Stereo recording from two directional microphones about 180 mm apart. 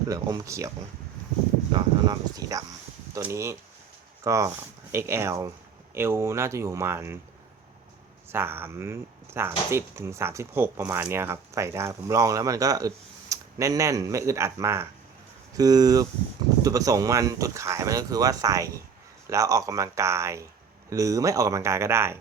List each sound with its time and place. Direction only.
0.1 s speech: 20° right (ahead or behind)
1.7 s speech: 20° right (ahead or behind)
8.3 s speech: 10° right (ahead or behind)